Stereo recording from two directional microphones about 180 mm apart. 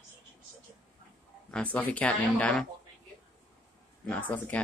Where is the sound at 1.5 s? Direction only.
10° left (ahead or behind).